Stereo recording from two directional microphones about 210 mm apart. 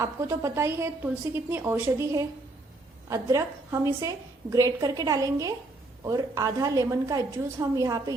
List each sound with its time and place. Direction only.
0.0 s a woman's voice: 15° right (ahead or behind)